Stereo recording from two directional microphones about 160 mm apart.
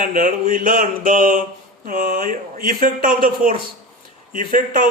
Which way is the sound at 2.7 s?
55° right (ahead or behind).